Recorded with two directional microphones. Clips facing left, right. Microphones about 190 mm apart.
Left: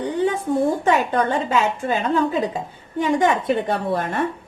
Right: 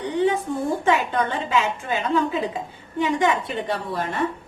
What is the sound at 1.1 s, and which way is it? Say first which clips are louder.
Speech: left 3 dB; 40° left (ahead or behind).